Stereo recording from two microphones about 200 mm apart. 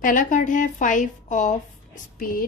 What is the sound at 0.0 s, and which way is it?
A woman's voice, 40° left (ahead or behind).